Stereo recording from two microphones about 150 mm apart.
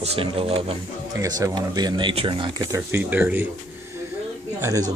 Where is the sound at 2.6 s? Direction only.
20° right (ahead or behind).